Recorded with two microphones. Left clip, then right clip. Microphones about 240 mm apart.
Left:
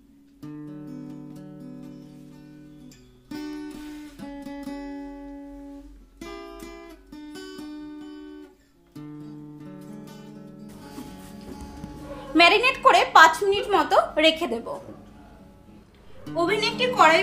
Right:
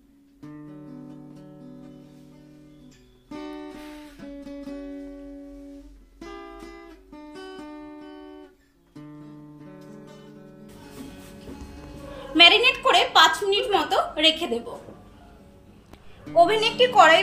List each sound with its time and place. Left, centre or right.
12.4 s a woman's voice: centre
16.3 s a woman's voice: right